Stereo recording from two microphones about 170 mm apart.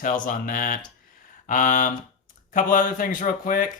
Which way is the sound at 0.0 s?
50° left (ahead or behind).